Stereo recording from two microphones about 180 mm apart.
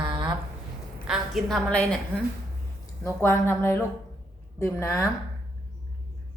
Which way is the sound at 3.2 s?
15° left (ahead or behind).